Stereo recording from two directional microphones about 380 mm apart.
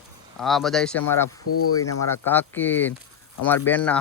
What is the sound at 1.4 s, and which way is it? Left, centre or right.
Speech, left.